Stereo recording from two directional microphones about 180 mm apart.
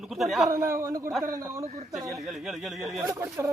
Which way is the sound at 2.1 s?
Centre (ahead or behind).